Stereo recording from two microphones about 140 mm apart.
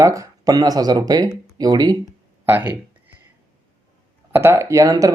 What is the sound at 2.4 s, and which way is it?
Speech, 15° right (ahead or behind).